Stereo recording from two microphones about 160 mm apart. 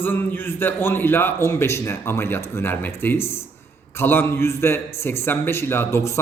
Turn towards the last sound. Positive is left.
turn(degrees=15)  # may be behind; listen again after turning